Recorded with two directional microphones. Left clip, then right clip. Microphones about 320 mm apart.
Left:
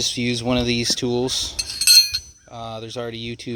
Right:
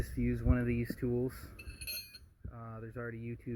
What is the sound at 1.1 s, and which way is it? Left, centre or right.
Speech, left.